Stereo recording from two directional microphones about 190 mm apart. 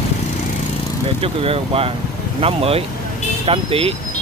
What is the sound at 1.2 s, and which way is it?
Speech, 30° right (ahead or behind).